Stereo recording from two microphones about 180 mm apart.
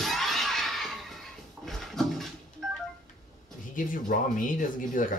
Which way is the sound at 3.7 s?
50° left (ahead or behind).